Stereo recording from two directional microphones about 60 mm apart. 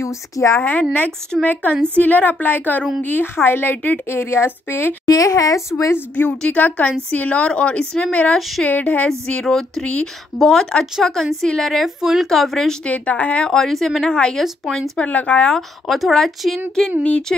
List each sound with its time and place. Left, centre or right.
0.0 s speech: left
0.6 s a woman's voice: left
4.1 s a woman's voice: left
5.0 s speech: left
5.9 s a woman's voice: left
8.4 s speech: centre
8.6 s a woman's voice: left
9.2 s speech: centre
11.8 s speech: centre
12.3 s speech: centre
12.8 s a woman's voice: left
13.5 s a woman's voice: centre
15.9 s speech: centre
17.3 s a sound: centre